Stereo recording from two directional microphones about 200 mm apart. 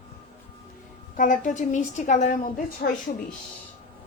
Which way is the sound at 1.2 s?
40° left (ahead or behind).